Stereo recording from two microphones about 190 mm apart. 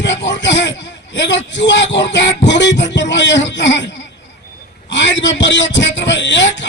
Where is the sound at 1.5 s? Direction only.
70° left (ahead or behind).